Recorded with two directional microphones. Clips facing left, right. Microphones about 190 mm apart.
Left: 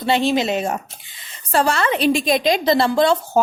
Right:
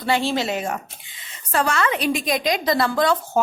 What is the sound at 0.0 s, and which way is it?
A woman's voice, 20° left (ahead or behind).